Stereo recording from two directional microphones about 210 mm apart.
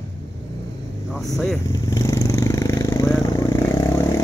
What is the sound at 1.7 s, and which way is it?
Vehicle, 15° left (ahead or behind).